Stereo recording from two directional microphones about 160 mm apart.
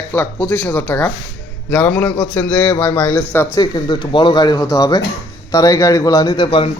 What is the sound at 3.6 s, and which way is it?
A man's voice, 25° left (ahead or behind).